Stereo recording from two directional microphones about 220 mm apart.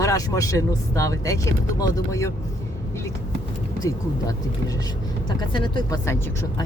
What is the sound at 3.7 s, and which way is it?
Speech, 15° left (ahead or behind).